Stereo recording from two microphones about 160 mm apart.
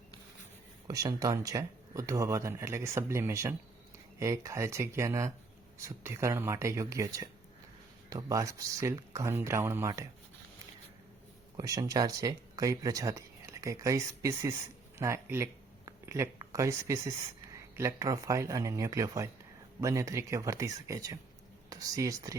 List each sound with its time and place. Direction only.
0.9 s speech: 20° right (ahead or behind)
11.5 s speech: 20° right (ahead or behind)